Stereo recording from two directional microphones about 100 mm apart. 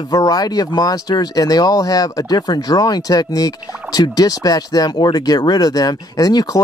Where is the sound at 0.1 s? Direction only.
40° left (ahead or behind).